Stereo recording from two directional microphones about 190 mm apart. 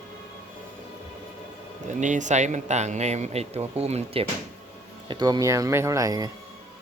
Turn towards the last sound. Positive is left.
turn(degrees=-20)  # may be behind; listen again after turning